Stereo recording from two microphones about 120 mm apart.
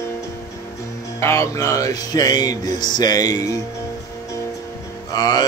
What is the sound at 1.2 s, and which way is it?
Music, 25° left (ahead or behind).